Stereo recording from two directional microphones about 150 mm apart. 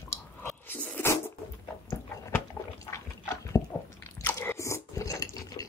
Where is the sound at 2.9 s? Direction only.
20° left (ahead or behind).